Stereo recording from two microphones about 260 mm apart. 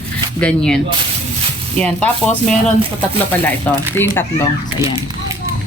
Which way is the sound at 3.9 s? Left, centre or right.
Centre.